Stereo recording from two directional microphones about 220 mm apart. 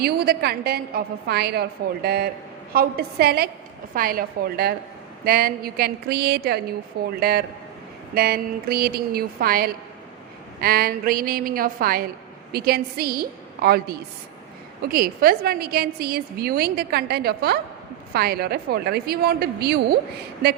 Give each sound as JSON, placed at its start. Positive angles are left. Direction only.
{"t": 0.0, "sound": "a woman's voice", "side_deg": -45}